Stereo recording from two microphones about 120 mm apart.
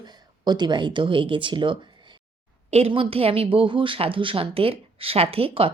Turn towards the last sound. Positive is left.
turn(degrees=-50)  # may be behind; listen again after turning